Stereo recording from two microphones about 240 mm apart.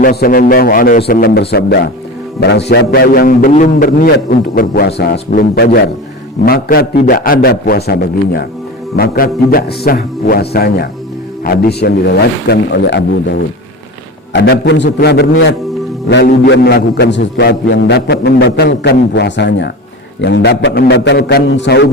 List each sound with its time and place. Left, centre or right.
0.0 s a man's voice: left